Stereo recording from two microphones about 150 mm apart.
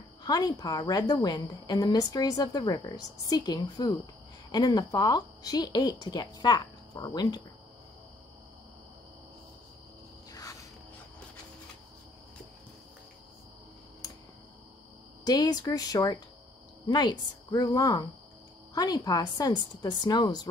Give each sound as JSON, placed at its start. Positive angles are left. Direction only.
{"t": 0.2, "sound": "a woman's voice", "side_deg": 25}
{"t": 10.3, "sound": "music", "side_deg": 20}
{"t": 15.2, "sound": "a woman's voice", "side_deg": 25}